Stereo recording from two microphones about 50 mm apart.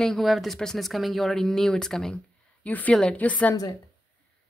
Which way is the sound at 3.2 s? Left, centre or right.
Left.